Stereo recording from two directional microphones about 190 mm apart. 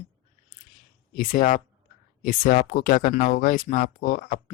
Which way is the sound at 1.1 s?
45° left (ahead or behind).